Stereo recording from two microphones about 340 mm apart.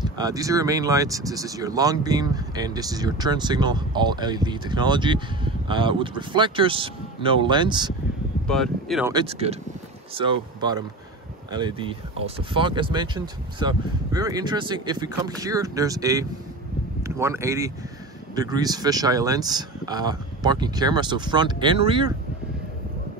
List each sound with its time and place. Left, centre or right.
0.0 s speech: centre
8.5 s speech: centre
9.1 s speech: centre